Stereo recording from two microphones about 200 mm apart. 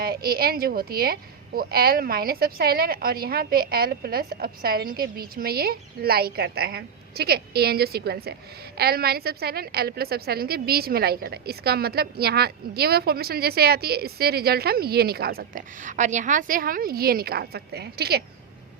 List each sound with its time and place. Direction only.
0.0 s a woman's voice: 50° right (ahead or behind)